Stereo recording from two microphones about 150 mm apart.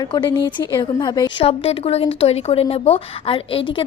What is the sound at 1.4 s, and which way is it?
A woman's voice, 40° left (ahead or behind).